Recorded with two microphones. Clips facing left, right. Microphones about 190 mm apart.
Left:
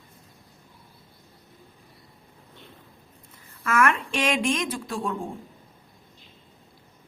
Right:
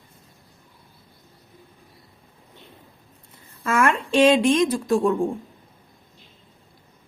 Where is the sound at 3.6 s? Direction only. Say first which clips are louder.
Right 2 dB; 30° right (ahead or behind).